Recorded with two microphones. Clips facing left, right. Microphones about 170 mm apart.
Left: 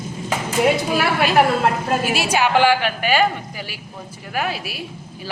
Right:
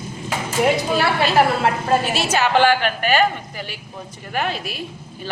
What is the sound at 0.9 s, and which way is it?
Speech, 15° left (ahead or behind).